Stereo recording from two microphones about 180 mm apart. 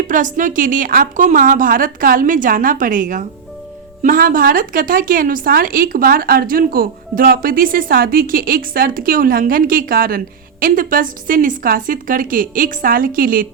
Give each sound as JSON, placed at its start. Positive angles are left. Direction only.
{"t": 0.1, "sound": "a woman's voice", "side_deg": -45}